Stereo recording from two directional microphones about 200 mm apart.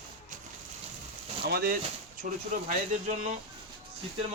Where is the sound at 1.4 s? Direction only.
50° right (ahead or behind).